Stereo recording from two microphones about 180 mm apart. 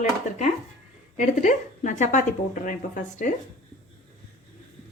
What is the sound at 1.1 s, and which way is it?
A woman's voice, 45° left (ahead or behind).